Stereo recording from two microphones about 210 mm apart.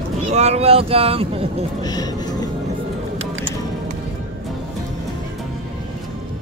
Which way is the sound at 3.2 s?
70° right (ahead or behind).